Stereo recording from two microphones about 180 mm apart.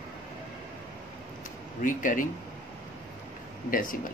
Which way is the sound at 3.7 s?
50° left (ahead or behind).